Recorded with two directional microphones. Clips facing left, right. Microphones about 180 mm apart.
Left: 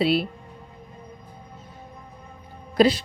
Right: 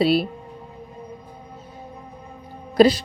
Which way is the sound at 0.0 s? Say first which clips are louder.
Right 3 dB; 40° right (ahead or behind).